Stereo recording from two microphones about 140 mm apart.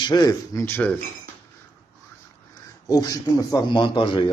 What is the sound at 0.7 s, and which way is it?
Speech, 10° left (ahead or behind).